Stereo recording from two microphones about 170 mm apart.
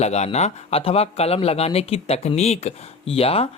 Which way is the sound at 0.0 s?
40° left (ahead or behind).